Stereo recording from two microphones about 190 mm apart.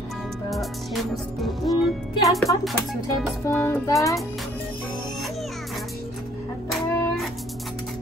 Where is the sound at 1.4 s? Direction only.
Centre (ahead or behind).